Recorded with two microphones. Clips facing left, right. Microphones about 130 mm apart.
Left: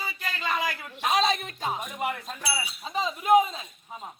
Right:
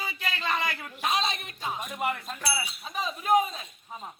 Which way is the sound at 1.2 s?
30° left (ahead or behind).